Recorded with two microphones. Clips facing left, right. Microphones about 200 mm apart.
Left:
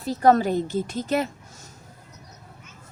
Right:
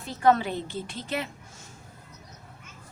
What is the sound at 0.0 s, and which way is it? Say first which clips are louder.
A woman's voice: left 4 dB; 40° left (ahead or behind).